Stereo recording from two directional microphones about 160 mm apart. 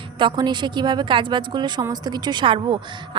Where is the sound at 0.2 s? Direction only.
30° right (ahead or behind).